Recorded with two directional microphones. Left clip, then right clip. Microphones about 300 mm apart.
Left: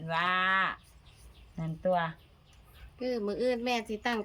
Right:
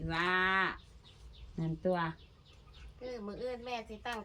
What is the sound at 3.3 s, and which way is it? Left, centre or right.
Speech, left.